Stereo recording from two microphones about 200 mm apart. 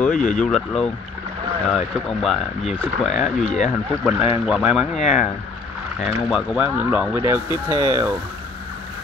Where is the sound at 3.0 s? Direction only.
35° left (ahead or behind).